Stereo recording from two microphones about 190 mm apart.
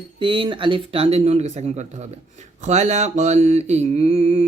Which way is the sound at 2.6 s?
35° right (ahead or behind).